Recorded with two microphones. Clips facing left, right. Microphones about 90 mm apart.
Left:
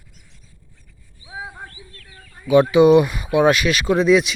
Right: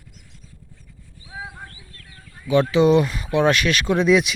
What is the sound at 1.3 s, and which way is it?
Horse, 15° left (ahead or behind).